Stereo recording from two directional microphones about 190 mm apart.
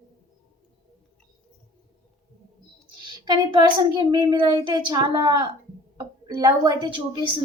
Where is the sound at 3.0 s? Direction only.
25° right (ahead or behind).